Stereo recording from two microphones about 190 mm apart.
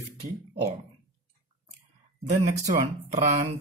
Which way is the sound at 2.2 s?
40° right (ahead or behind).